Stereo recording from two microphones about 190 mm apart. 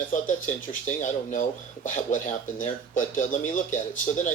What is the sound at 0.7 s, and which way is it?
Speech, 40° left (ahead or behind).